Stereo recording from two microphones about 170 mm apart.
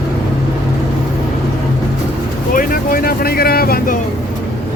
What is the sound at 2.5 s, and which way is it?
Speech, 60° left (ahead or behind).